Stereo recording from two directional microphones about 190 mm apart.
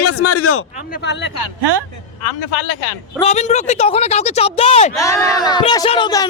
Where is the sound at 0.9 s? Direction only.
65° left (ahead or behind).